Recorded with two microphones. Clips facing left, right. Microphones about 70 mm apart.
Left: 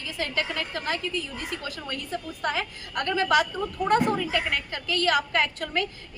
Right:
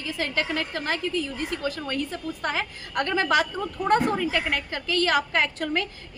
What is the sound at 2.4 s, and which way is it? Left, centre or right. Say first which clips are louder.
A woman's voice: even; right.